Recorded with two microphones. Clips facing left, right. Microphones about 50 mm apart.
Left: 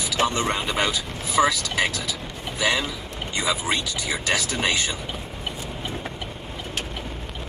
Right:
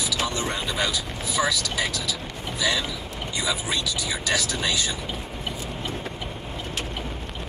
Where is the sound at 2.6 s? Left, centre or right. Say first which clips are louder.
Left 2 dB; left.